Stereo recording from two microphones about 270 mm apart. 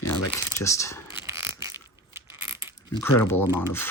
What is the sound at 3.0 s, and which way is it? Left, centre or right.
Speech, centre.